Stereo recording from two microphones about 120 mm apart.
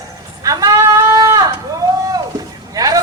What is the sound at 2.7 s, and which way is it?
Speech, 30° right (ahead or behind).